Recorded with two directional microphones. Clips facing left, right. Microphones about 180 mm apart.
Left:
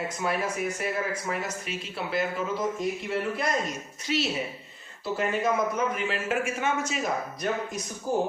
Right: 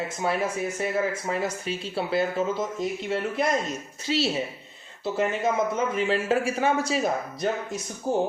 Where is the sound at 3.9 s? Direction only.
30° right (ahead or behind).